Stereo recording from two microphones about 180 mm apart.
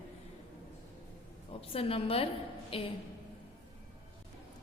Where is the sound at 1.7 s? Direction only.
30° left (ahead or behind).